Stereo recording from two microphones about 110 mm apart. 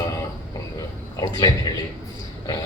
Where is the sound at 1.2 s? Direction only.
35° left (ahead or behind).